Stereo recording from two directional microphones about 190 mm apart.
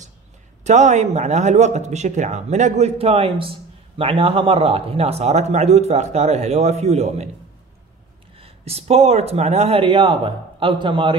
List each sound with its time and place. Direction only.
0.7 s speech: 40° right (ahead or behind)
8.4 s speech: 30° right (ahead or behind)